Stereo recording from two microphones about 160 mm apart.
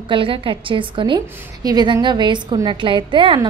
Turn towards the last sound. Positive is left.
turn(degrees=-30)  # may be behind; listen again after turning